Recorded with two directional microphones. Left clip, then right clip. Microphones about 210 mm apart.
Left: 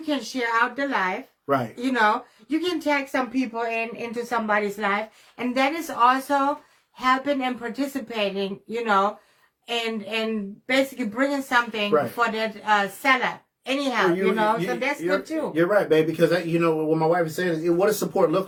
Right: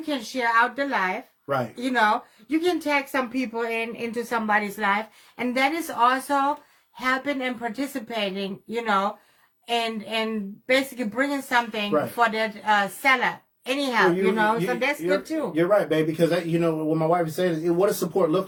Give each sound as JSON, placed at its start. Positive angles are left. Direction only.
{"t": 0.0, "sound": "speech", "side_deg": -20}
{"t": 1.5, "sound": "speech", "side_deg": 15}
{"t": 1.7, "sound": "speech", "side_deg": -20}
{"t": 15.5, "sound": "speech", "side_deg": 15}